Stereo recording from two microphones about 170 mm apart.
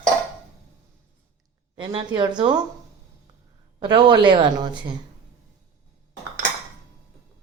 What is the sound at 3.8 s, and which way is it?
Speech, 25° right (ahead or behind).